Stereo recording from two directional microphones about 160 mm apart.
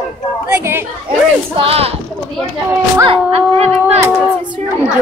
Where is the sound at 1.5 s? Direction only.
35° right (ahead or behind).